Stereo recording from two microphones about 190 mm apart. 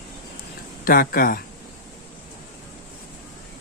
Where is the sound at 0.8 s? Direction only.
50° left (ahead or behind).